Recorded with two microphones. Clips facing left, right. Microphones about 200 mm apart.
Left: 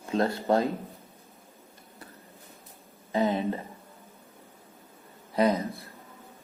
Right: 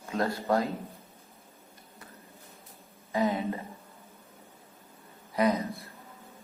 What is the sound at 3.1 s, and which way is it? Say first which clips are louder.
Speech: left 2 dB; 30° left (ahead or behind).